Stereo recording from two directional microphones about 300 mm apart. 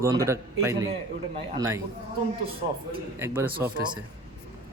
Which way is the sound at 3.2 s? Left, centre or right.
Centre.